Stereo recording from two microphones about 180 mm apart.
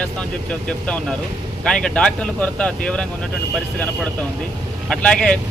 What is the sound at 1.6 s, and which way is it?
Speech, 5° left (ahead or behind).